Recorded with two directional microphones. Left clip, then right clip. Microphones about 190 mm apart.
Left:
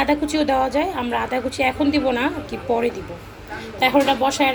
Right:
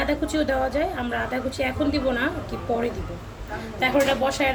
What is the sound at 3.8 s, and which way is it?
Speech, 20° left (ahead or behind).